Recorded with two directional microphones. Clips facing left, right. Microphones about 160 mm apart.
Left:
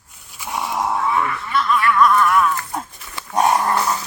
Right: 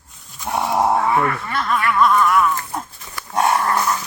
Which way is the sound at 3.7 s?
30° left (ahead or behind).